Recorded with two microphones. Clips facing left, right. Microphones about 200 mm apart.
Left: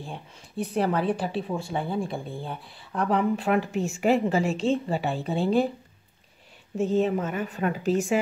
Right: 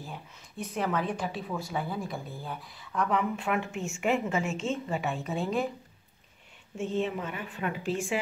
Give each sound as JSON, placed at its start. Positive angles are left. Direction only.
{"t": 0.0, "sound": "speech", "side_deg": 30}
{"t": 6.8, "sound": "speech", "side_deg": 40}